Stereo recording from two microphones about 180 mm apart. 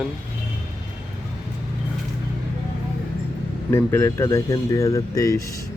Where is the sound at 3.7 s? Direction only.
15° left (ahead or behind).